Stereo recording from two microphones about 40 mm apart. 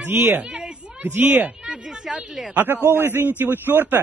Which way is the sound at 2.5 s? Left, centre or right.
Right.